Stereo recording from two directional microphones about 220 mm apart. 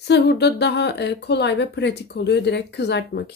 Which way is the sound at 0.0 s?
50° left (ahead or behind).